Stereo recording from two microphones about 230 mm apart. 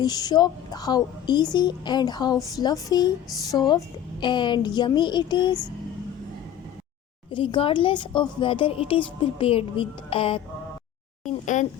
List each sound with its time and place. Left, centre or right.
0.0 s a woman's voice: centre
7.3 s a woman's voice: left
11.3 s a sound: left